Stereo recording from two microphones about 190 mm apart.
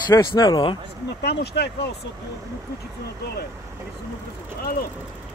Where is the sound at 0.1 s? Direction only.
20° left (ahead or behind).